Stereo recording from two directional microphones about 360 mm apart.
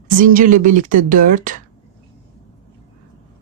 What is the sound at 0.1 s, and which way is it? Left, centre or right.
A woman's voice, right.